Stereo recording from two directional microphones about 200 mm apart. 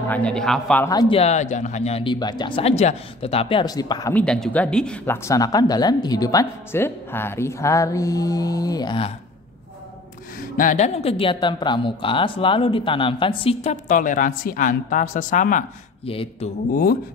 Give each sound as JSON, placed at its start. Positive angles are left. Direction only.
{"t": 0.1, "sound": "speech", "side_deg": 5}
{"t": 0.8, "sound": "speech", "side_deg": 20}
{"t": 4.1, "sound": "speech", "side_deg": 5}
{"t": 10.6, "sound": "speech", "side_deg": 35}
{"t": 13.8, "sound": "speech", "side_deg": 40}
{"t": 16.1, "sound": "speech", "side_deg": 30}